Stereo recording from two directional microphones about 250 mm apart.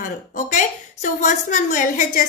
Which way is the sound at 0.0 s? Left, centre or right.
Left.